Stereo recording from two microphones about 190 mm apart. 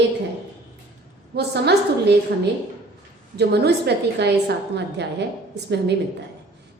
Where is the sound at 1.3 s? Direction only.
60° right (ahead or behind).